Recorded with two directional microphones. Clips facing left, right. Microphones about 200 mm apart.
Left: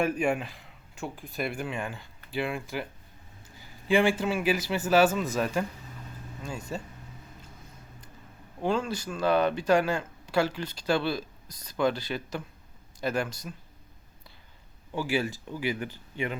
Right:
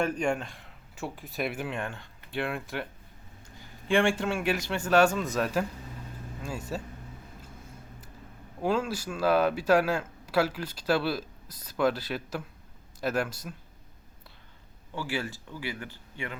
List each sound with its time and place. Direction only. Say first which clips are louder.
0.0 s speech: left 1 dB; 5° left (ahead or behind)
6.7 s speech: even; centre (ahead or behind)
8.6 s speech: even; 5° right (ahead or behind)
14.9 s speech: left 5 dB; 15° left (ahead or behind)